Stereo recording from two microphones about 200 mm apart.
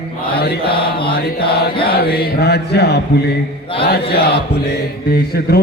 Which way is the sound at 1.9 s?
50° left (ahead or behind).